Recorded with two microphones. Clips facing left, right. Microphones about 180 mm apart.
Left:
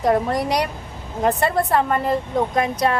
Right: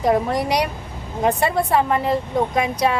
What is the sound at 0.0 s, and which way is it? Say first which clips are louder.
A woman's voice: even; centre (ahead or behind).